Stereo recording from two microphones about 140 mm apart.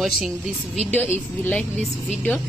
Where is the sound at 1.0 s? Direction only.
15° left (ahead or behind).